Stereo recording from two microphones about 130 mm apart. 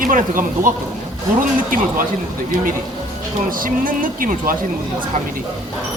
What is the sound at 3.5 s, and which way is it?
Speech, 90° right.